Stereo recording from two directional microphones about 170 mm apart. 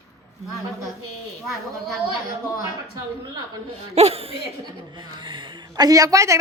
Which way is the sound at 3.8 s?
40° right (ahead or behind).